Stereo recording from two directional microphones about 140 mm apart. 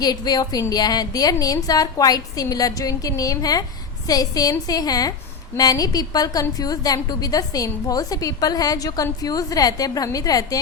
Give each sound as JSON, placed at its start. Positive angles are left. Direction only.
{"t": 0.0, "sound": "a woman's voice", "side_deg": 30}